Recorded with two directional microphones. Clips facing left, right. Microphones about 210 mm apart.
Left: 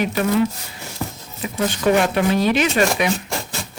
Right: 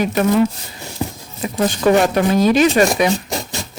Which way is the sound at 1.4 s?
40° right (ahead or behind).